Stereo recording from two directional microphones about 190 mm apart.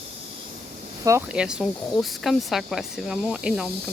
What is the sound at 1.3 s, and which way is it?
Speech, 5° right (ahead or behind).